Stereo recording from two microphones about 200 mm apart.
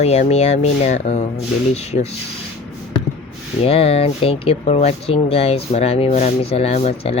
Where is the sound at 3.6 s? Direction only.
30° left (ahead or behind).